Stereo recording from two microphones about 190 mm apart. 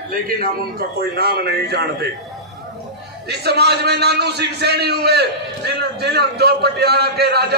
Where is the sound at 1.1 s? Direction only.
55° right (ahead or behind).